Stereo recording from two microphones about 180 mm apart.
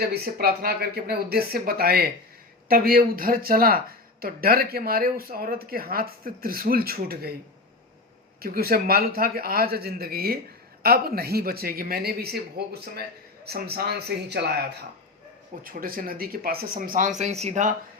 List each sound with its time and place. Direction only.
0.0 s speech: 60° right (ahead or behind)
8.4 s speech: 55° right (ahead or behind)
15.6 s speech: 55° right (ahead or behind)